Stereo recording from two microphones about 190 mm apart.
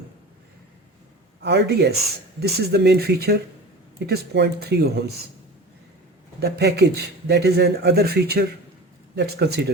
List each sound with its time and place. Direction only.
1.4 s a man's voice: 60° right (ahead or behind)
6.4 s a man's voice: 60° right (ahead or behind)